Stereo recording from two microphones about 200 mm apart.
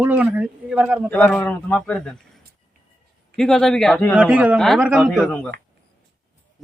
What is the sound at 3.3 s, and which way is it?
Speech, 5° left (ahead or behind).